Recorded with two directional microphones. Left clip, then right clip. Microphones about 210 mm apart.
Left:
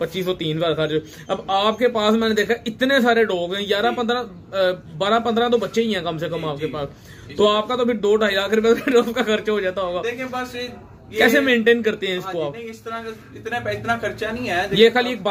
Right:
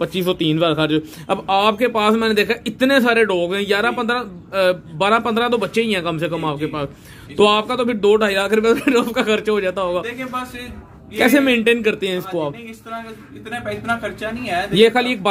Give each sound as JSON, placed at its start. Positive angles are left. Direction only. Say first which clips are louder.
{"t": 0.0, "sound": "a man's voice", "louder": "right 4 dB", "side_deg": -25}
{"t": 10.0, "sound": "speech", "louder": "even", "side_deg": 15}
{"t": 11.1, "sound": "a man's voice", "louder": "right 1 dB", "side_deg": -25}
{"t": 13.5, "sound": "speech", "louder": "even", "side_deg": 15}
{"t": 14.7, "sound": "a man's voice", "louder": "right 1 dB", "side_deg": -25}